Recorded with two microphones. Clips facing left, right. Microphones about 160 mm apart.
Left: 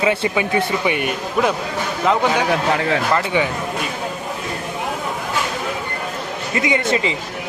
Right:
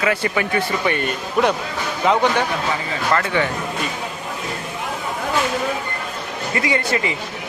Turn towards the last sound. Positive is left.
turn(degrees=20)  # may be behind; listen again after turning